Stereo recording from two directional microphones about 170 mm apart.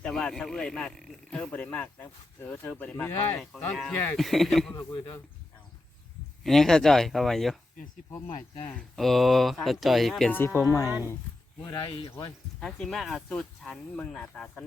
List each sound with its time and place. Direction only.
0.0 s speech: 5° left (ahead or behind)
4.7 s speech: 20° left (ahead or behind)
6.4 s speech: centre (ahead or behind)
8.3 s speech: 30° left (ahead or behind)
8.6 s speech: 5° left (ahead or behind)
10.8 s speech: 15° right (ahead or behind)
11.6 s speech: 25° left (ahead or behind)
12.5 s speech: 5° left (ahead or behind)